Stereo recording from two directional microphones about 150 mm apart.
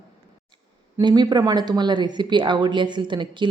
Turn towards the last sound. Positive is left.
turn(degrees=-30)  # may be behind; listen again after turning